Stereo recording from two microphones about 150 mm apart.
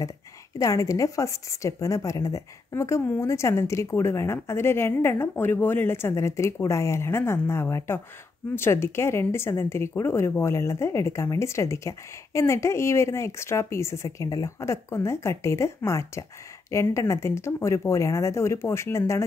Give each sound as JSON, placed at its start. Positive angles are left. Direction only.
{"t": 0.6, "sound": "a woman's voice", "side_deg": 20}